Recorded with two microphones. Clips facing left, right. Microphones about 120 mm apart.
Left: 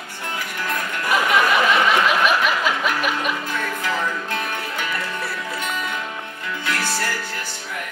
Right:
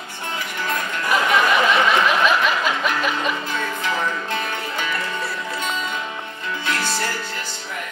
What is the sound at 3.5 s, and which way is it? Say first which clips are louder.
Music: even; 25° right (ahead or behind).